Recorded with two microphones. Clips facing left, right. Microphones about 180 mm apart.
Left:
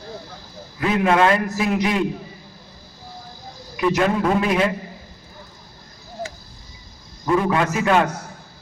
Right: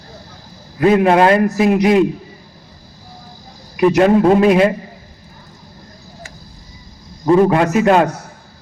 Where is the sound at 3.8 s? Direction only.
35° right (ahead or behind).